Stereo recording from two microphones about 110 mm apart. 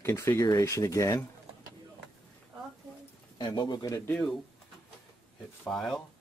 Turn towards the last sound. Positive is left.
turn(degrees=5)  # may be behind; listen again after turning